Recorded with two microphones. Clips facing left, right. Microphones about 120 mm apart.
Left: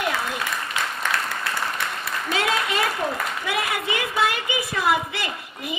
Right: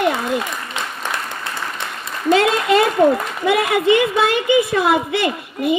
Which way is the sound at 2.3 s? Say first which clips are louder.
Right 10 dB; 60° right (ahead or behind).